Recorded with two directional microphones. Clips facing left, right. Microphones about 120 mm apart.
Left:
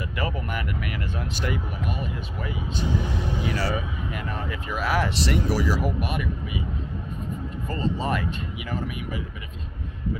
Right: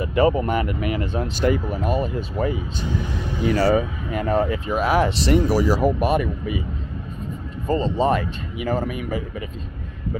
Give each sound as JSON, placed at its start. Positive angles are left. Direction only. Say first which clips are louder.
{"t": 0.0, "sound": "speech", "louder": "right 11 dB", "side_deg": -30}
{"t": 7.6, "sound": "speech", "louder": "right 8 dB", "side_deg": -25}